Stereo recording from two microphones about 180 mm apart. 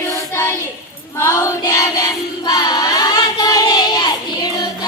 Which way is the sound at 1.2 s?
15° left (ahead or behind).